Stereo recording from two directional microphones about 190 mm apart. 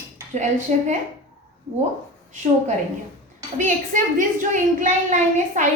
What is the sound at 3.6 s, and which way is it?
A woman's voice, 40° right (ahead or behind).